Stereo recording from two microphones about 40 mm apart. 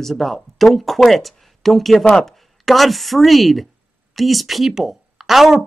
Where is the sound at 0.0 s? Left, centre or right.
Centre.